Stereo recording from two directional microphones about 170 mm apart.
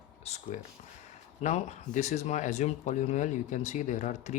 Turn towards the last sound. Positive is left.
turn(degrees=45)  # may be behind; listen again after turning